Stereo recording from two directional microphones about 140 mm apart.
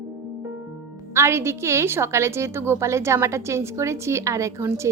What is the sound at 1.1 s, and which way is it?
A woman's voice, 20° right (ahead or behind).